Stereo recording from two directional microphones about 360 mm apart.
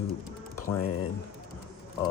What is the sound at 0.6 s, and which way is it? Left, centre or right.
Speech, left.